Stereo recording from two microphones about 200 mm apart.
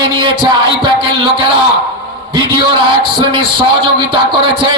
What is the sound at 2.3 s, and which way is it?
A man's voice, 25° right (ahead or behind).